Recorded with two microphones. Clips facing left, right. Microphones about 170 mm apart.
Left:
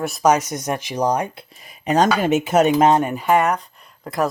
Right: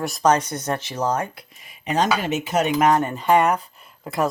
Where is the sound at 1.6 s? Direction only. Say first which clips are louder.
Left 5 dB; 40° left (ahead or behind).